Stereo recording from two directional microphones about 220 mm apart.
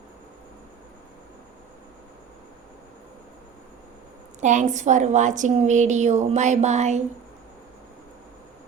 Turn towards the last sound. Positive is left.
turn(degrees=-30)  # may be behind; listen again after turning